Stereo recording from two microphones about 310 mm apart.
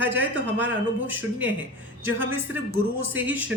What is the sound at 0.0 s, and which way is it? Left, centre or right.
Speech, centre.